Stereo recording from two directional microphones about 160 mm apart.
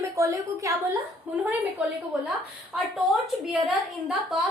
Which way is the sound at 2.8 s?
Centre (ahead or behind).